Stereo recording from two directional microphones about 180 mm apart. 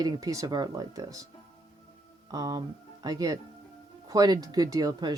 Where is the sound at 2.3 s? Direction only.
20° right (ahead or behind).